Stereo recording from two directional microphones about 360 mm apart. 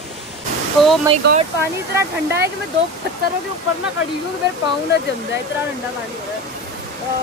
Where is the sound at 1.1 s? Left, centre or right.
Right.